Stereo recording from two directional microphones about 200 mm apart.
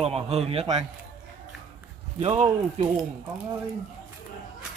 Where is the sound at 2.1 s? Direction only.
30° right (ahead or behind).